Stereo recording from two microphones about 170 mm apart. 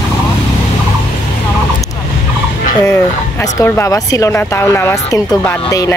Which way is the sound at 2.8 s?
20° left (ahead or behind).